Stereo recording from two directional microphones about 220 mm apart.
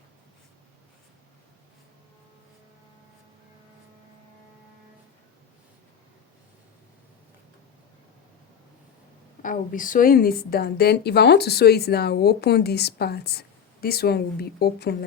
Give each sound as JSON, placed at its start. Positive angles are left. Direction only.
{"t": 9.4, "sound": "a woman's voice", "side_deg": 40}